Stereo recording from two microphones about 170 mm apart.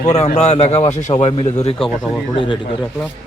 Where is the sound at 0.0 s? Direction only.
45° left (ahead or behind).